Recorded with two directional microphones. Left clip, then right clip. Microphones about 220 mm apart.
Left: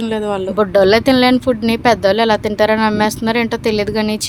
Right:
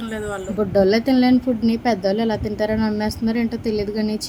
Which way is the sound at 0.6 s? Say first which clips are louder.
Left 6 dB; 40° left (ahead or behind).